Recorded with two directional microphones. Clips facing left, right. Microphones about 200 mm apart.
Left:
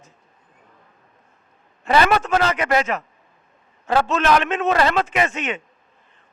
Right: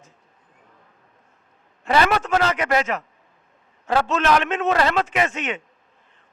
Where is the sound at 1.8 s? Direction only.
15° left (ahead or behind).